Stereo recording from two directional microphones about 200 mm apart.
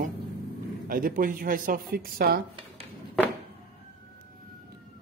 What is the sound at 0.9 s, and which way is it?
Speech, 45° right (ahead or behind).